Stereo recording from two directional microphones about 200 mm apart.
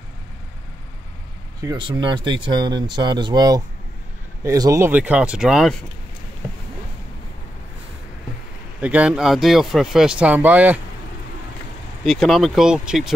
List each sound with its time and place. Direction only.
1.6 s speech: 20° right (ahead or behind); by 5.8 s centre (ahead or behind)
8.8 s speech: 5° right (ahead or behind)
12.0 s speech: centre (ahead or behind)